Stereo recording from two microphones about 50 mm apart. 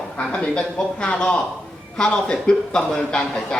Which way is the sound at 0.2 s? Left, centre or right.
Centre.